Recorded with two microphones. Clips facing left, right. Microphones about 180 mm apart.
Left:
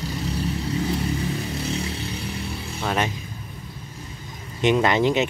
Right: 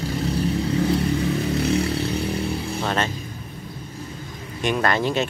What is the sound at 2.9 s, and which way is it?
Speech, 15° left (ahead or behind).